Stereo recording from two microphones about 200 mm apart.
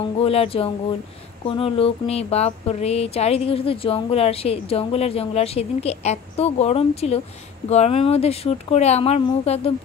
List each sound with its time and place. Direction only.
0.0 s speech: 30° left (ahead or behind)